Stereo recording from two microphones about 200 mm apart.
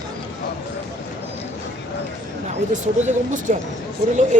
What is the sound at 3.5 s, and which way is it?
Speech, 40° right (ahead or behind).